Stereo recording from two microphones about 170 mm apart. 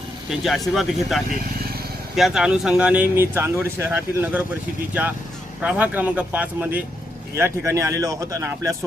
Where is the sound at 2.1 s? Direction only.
Centre (ahead or behind).